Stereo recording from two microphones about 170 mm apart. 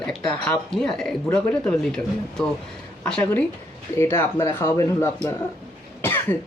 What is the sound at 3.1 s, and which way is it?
Speech, 5° left (ahead or behind).